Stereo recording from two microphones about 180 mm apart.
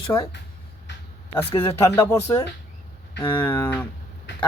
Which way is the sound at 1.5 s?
30° left (ahead or behind).